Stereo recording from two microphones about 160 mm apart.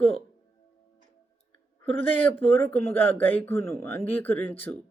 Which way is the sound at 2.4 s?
15° left (ahead or behind).